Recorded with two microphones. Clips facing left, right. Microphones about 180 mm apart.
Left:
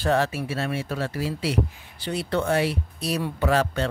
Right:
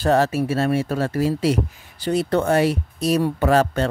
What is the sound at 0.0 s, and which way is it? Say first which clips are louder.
Speech: right 5 dB; 40° right (ahead or behind).